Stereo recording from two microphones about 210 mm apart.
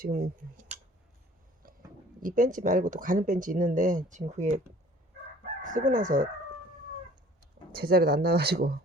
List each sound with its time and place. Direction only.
0.0 s speech: 40° right (ahead or behind)
1.6 s a sound: 45° right (ahead or behind)
2.2 s speech: 40° right (ahead or behind)
5.6 s speech: 40° right (ahead or behind)
7.7 s speech: 45° right (ahead or behind)